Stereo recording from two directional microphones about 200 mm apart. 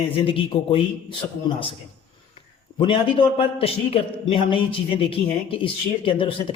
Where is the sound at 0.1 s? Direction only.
25° left (ahead or behind).